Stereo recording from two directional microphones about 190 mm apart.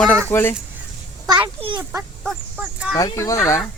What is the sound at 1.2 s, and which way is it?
Speech, 25° right (ahead or behind).